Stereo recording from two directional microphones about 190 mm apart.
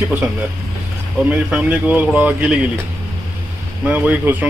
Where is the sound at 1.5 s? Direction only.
5° right (ahead or behind).